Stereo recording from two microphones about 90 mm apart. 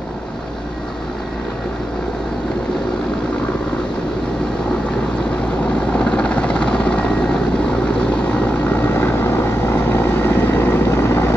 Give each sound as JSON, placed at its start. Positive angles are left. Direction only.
{"t": 5.9, "sound": "helicopter", "side_deg": 10}
{"t": 8.6, "sound": "vehicle", "side_deg": 25}